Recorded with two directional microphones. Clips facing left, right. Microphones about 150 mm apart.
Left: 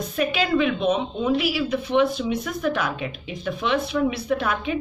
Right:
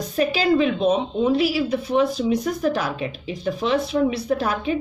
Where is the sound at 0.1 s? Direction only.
35° right (ahead or behind).